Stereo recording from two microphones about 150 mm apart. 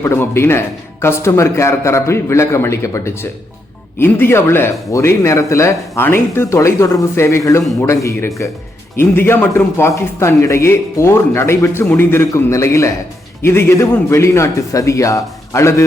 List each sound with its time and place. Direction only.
0.0 s a man's voice: 15° left (ahead or behind)